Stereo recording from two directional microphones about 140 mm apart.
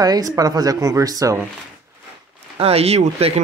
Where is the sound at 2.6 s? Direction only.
45° right (ahead or behind).